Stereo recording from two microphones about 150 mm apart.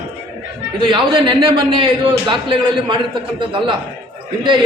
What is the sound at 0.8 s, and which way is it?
A man's voice, 35° right (ahead or behind).